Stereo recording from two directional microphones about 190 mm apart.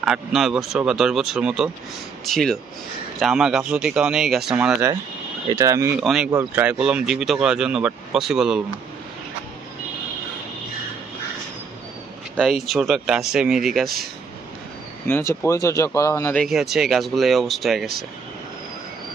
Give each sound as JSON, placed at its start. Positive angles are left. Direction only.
{"t": 0.0, "sound": "speech", "side_deg": 0}
{"t": 4.7, "sound": "speech", "side_deg": -15}
{"t": 6.0, "sound": "speech", "side_deg": -5}
{"t": 12.6, "sound": "speech", "side_deg": 0}
{"t": 15.0, "sound": "speech", "side_deg": 15}